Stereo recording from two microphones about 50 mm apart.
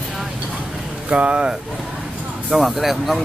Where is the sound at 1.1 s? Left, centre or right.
Right.